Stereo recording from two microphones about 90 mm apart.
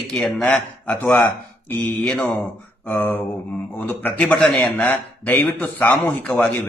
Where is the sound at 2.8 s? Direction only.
20° left (ahead or behind).